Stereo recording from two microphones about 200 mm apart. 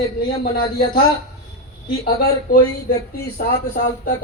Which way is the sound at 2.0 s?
50° left (ahead or behind).